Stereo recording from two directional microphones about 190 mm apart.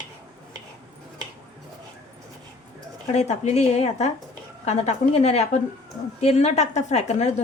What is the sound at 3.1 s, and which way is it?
A woman's voice, 35° left (ahead or behind).